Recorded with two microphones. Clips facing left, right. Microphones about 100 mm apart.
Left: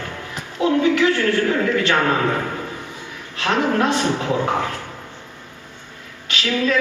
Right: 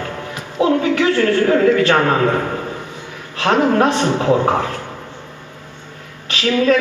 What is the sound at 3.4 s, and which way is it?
A woman's voice, 35° right (ahead or behind).